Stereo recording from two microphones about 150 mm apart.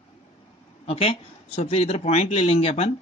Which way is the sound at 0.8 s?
40° left (ahead or behind).